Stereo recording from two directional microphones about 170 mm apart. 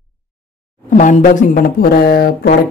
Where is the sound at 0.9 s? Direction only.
50° left (ahead or behind); by 2.5 s 65° left (ahead or behind).